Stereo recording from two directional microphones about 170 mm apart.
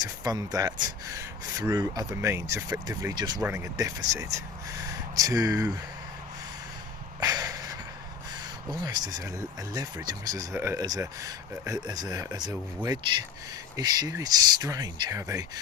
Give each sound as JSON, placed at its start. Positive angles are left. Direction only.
{"t": 0.0, "sound": "speech", "side_deg": -20}
{"t": 7.2, "sound": "a sound", "side_deg": -20}
{"t": 8.7, "sound": "speech", "side_deg": -25}